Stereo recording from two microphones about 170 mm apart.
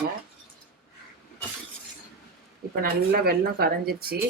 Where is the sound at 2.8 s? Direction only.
65° right (ahead or behind).